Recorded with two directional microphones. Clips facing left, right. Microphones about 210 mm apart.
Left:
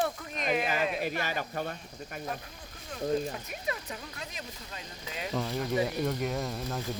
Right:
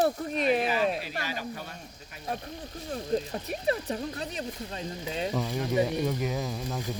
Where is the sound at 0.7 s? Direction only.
50° left (ahead or behind).